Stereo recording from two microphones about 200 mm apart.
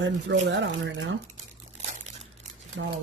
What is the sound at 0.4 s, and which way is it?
Speech, 60° right (ahead or behind).